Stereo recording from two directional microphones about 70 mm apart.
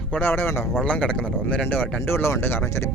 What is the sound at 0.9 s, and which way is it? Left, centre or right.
Speech, centre.